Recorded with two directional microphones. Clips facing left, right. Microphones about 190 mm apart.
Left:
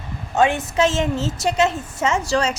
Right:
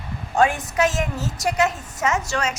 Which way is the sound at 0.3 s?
25° left (ahead or behind).